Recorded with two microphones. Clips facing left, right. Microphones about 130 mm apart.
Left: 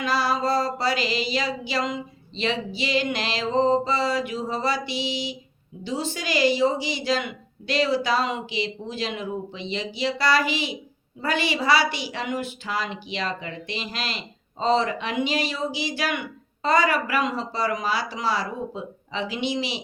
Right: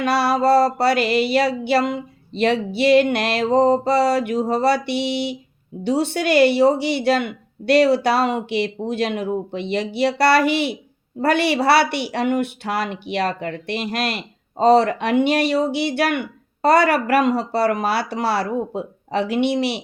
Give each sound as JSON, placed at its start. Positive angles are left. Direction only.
{"t": 0.0, "sound": "a woman's voice", "side_deg": -65}